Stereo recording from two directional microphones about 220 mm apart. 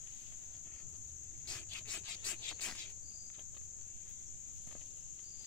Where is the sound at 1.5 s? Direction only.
5° left (ahead or behind).